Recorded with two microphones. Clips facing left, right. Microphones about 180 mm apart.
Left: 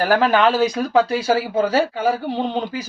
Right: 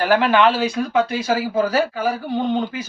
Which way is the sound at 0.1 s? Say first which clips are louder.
Right 1 dB; 40° left (ahead or behind).